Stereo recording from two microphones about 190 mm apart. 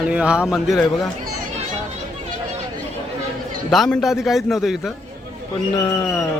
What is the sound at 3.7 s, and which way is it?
A man's voice, centre (ahead or behind).